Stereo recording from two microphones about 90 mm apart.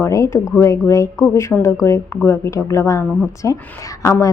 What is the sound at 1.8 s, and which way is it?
A woman's voice, 35° left (ahead or behind).